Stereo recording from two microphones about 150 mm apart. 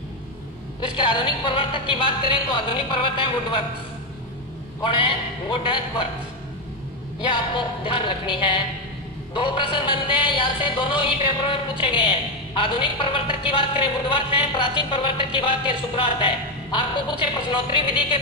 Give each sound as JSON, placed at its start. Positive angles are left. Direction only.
{"t": 0.8, "sound": "music", "side_deg": 35}
{"t": 4.8, "sound": "music", "side_deg": 35}
{"t": 7.2, "sound": "music", "side_deg": 35}